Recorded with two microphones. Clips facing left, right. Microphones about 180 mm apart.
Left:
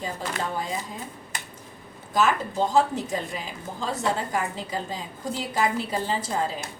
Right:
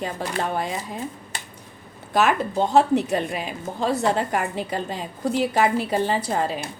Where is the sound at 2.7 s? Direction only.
65° right (ahead or behind).